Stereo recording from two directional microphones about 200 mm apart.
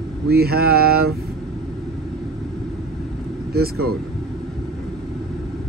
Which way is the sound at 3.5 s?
50° right (ahead or behind).